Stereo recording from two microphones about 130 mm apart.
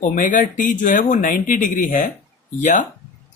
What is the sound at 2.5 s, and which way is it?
Speech, 75° left (ahead or behind).